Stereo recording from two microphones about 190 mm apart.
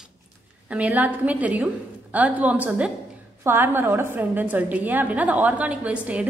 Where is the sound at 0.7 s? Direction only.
10° right (ahead or behind).